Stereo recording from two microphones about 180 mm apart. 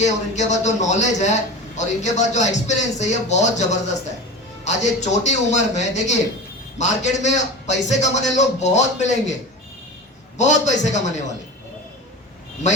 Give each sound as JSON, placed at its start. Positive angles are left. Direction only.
{"t": 0.0, "sound": "a man's voice", "side_deg": 40}
{"t": 10.3, "sound": "a man's voice", "side_deg": 40}